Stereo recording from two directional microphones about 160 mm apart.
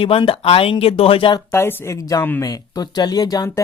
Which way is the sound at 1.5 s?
15° left (ahead or behind).